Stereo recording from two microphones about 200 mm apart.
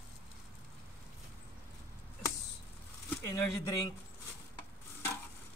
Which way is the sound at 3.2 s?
15° left (ahead or behind).